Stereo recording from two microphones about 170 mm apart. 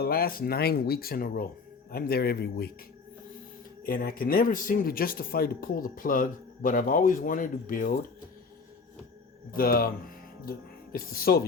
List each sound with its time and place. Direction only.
0.0 s a man's voice: 65° left (ahead or behind)
3.8 s speech: 60° left (ahead or behind)
9.5 s speech: 60° left (ahead or behind)
10.9 s speech: 60° left (ahead or behind)